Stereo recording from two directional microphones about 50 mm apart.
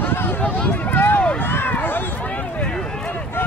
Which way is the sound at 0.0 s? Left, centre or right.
Left.